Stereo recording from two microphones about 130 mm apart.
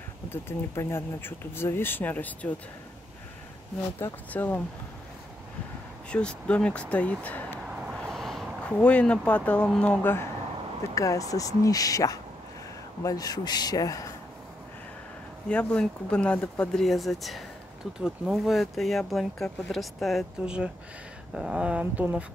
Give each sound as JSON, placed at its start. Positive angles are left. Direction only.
{"t": 0.3, "sound": "speech", "side_deg": 20}
{"t": 4.0, "sound": "speech", "side_deg": 15}
{"t": 6.0, "sound": "speech", "side_deg": 10}
{"t": 7.7, "sound": "a sound", "side_deg": -5}
{"t": 11.0, "sound": "speech", "side_deg": 25}
{"t": 15.4, "sound": "speech", "side_deg": 10}